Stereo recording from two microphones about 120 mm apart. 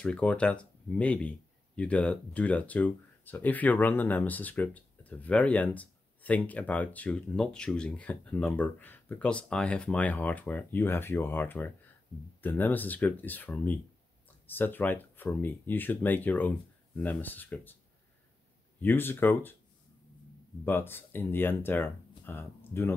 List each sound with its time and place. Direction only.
0.0 s speech: 10° left (ahead or behind)
18.8 s speech: 15° left (ahead or behind)
20.6 s speech: 20° left (ahead or behind)